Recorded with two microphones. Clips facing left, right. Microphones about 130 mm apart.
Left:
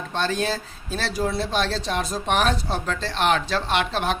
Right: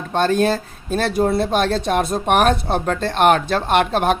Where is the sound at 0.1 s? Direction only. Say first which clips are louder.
Right 8 dB; 50° right (ahead or behind).